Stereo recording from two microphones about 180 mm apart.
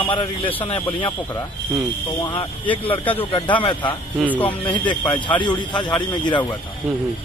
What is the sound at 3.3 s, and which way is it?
Speech, 30° left (ahead or behind).